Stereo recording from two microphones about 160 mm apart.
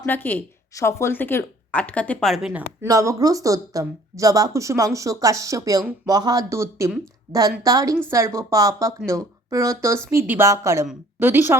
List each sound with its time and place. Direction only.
0.0 s speech: 10° left (ahead or behind); by 2.6 s 5° right (ahead or behind)
2.8 s a woman's voice: 20° right (ahead or behind)